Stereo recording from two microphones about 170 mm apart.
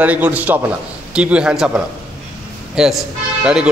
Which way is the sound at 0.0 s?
10° right (ahead or behind).